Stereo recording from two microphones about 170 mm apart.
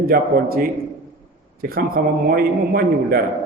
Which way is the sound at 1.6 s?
60° right (ahead or behind).